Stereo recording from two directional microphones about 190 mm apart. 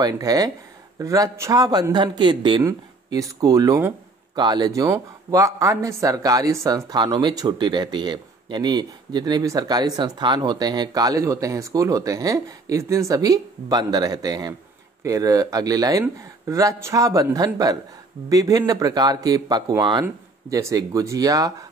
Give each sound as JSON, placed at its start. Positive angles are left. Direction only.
{"t": 0.0, "sound": "speech", "side_deg": -20}